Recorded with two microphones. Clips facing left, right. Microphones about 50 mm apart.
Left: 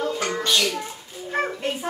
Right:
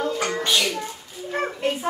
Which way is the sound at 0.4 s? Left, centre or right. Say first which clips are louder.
Left 1 dB; centre.